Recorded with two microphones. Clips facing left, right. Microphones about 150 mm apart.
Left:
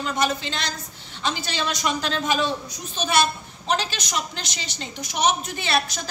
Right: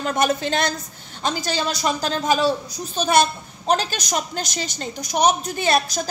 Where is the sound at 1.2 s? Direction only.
40° right (ahead or behind).